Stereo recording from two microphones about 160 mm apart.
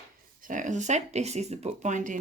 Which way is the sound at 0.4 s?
55° right (ahead or behind).